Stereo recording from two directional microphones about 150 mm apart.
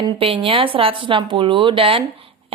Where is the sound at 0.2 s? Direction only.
35° right (ahead or behind).